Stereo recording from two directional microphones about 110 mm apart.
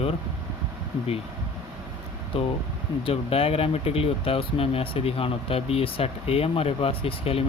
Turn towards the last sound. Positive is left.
turn(degrees=60)  # may be behind; listen again after turning